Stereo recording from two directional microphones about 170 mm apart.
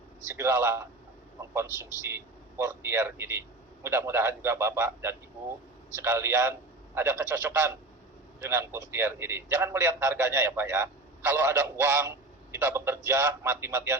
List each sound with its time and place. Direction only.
0.3 s a man's voice: 15° right (ahead or behind)